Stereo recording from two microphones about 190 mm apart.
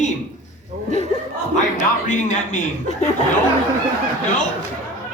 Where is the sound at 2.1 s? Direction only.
40° left (ahead or behind).